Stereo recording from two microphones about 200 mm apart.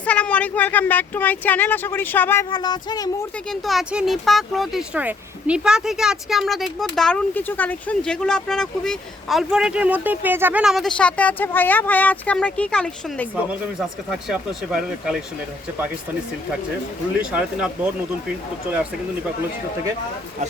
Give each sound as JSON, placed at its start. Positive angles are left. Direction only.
{"t": 0.0, "sound": "speech", "side_deg": 5}
{"t": 2.5, "sound": "music", "side_deg": 20}
{"t": 3.5, "sound": "speech", "side_deg": 0}
{"t": 13.3, "sound": "speech", "side_deg": -5}
{"t": 17.2, "sound": "speech", "side_deg": -5}